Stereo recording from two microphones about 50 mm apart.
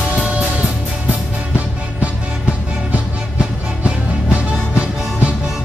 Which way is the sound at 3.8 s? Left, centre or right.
Right.